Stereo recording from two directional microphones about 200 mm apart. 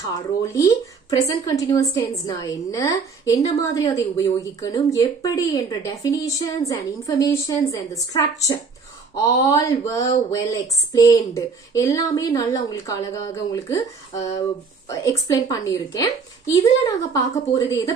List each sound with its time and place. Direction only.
0.0 s a woman's voice: 15° left (ahead or behind)